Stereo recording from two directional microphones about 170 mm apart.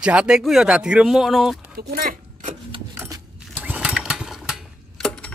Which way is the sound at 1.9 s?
55° right (ahead or behind).